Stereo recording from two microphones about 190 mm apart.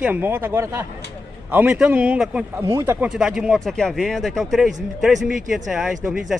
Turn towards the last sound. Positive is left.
turn(degrees=0)  # may be behind; listen again after turning